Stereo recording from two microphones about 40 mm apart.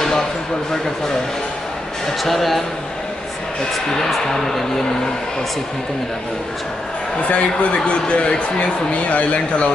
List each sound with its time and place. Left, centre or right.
2.2 s a man's voice: centre
3.9 s a man's voice: centre
7.2 s a man's voice: left